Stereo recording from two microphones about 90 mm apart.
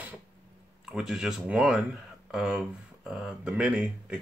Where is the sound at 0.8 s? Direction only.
5° right (ahead or behind).